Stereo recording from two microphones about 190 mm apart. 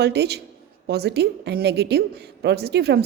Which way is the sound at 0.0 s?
60° right (ahead or behind).